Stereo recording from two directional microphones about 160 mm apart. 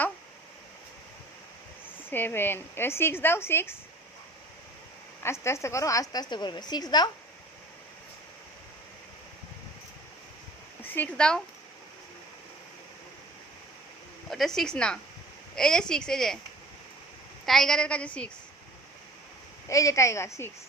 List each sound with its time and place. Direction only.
2.0 s speech: 15° left (ahead or behind)
5.2 s a woman's voice: 15° left (ahead or behind)
10.9 s a woman's voice: 10° left (ahead or behind)
14.3 s a woman's voice: centre (ahead or behind)
17.4 s a woman's voice: centre (ahead or behind)
19.6 s a woman's voice: 20° left (ahead or behind)